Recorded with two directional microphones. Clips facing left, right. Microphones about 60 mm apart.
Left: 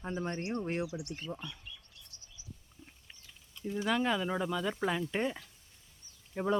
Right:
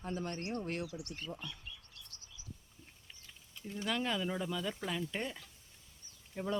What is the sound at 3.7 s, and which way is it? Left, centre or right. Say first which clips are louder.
Speech: left 5 dB; centre.